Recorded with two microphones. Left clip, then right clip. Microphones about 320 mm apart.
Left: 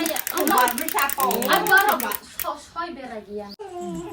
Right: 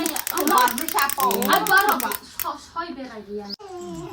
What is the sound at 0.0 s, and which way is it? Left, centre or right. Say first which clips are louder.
Ratchet: even; centre.